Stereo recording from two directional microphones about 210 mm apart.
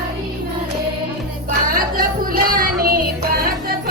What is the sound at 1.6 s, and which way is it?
Music, 40° right (ahead or behind).